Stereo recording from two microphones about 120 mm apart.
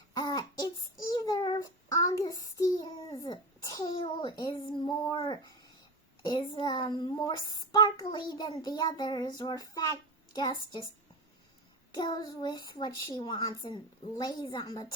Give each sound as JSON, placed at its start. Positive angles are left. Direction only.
{"t": 0.1, "sound": "child singing", "side_deg": 35}
{"t": 6.2, "sound": "a sound", "side_deg": 40}
{"t": 7.0, "sound": "child singing", "side_deg": 35}
{"t": 11.9, "sound": "a child's voice", "side_deg": 35}